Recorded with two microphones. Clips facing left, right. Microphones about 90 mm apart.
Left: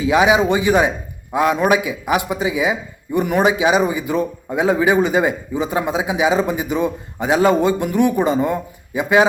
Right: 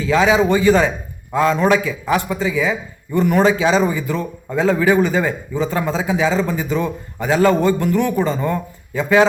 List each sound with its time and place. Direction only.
0.0 s a man's voice: 15° left (ahead or behind)